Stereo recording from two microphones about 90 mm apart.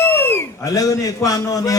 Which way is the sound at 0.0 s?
25° left (ahead or behind).